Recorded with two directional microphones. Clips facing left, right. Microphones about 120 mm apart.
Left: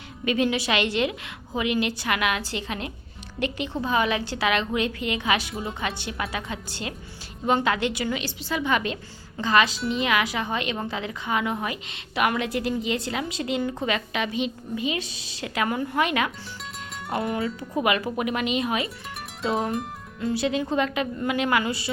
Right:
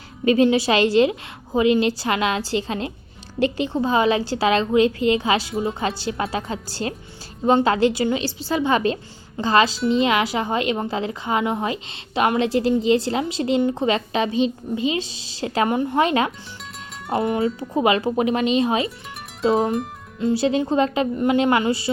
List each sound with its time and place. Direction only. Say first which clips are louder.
0.3 s a woman's voice: right 7 dB; 30° right (ahead or behind)